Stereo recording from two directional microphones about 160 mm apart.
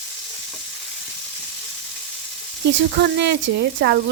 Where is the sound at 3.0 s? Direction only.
90° right.